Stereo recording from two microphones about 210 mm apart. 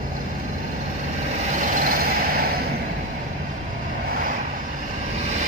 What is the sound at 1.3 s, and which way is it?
Vehicle, 35° right (ahead or behind).